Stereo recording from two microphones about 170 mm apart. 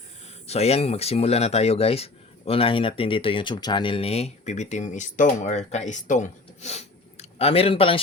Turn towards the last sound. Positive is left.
turn(degrees=35)  # may be behind; listen again after turning